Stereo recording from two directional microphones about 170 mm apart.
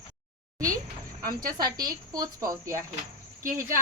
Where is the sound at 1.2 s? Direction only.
60° right (ahead or behind).